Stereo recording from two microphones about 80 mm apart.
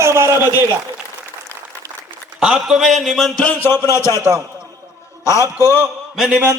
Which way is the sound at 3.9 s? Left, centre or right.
Left.